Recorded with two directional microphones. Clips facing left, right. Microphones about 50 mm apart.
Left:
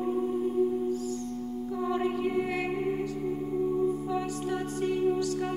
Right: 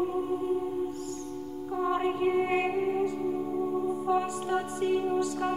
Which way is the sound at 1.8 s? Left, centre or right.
Right.